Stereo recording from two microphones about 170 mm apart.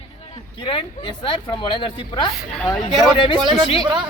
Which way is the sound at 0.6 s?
30° left (ahead or behind).